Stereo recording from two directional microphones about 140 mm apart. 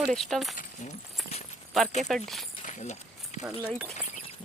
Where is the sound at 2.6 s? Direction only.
55° left (ahead or behind).